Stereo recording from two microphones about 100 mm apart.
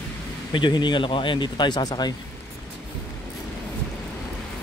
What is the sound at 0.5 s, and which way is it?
A man's voice, 50° left (ahead or behind).